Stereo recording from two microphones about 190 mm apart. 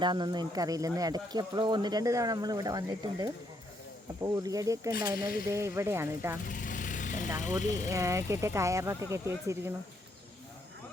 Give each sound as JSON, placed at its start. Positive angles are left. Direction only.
{"t": 0.0, "sound": "speech", "side_deg": -25}
{"t": 6.5, "sound": "vehicle", "side_deg": 45}
{"t": 7.6, "sound": "speech", "side_deg": 40}
{"t": 7.9, "sound": "speech", "side_deg": -15}